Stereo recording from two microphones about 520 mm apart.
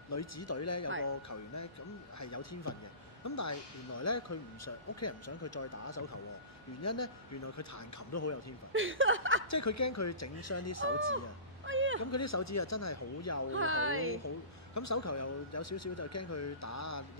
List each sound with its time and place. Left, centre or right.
0.1 s speech: left
8.1 s speech: left
8.7 s speech: right
9.5 s speech: left
11.6 s a sound: right
12.0 s speech: left
13.5 s speech: right
14.2 s speech: left